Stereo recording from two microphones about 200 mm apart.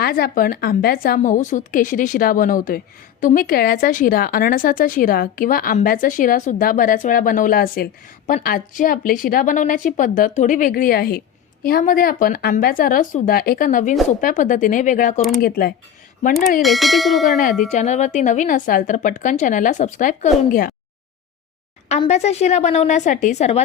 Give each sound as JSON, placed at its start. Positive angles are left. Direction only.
{"t": 0.0, "sound": "a woman's voice", "side_deg": 50}
{"t": 15.4, "sound": "a woman's voice", "side_deg": 50}
{"t": 16.6, "sound": "a sound", "side_deg": 0}
{"t": 17.7, "sound": "a woman's voice", "side_deg": 35}
{"t": 21.8, "sound": "a woman's voice", "side_deg": 35}